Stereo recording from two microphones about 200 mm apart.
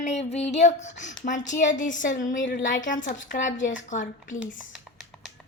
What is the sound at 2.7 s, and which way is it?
Speech, 40° left (ahead or behind).